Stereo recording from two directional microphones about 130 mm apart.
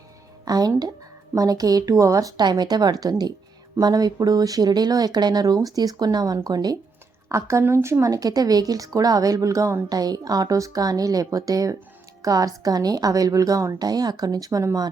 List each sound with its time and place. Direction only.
0.4 s music: 30° right (ahead or behind)
1.4 s speech: 30° right (ahead or behind)